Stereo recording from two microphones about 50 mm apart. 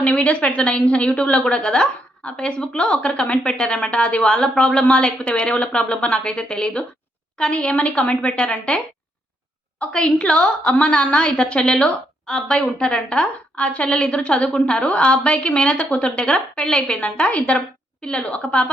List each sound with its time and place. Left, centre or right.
0.0 s a woman's voice: left
9.9 s a woman's voice: left